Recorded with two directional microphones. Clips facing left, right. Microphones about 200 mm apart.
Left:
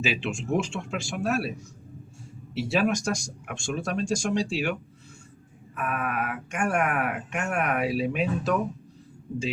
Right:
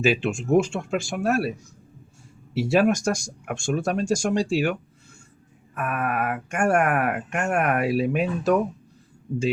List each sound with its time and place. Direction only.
0.0 s speech: 45° right (ahead or behind)
2.6 s speech: 50° right (ahead or behind)
5.7 s speech: 50° right (ahead or behind)